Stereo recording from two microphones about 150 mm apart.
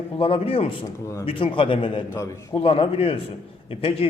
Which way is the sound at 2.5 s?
35° left (ahead or behind).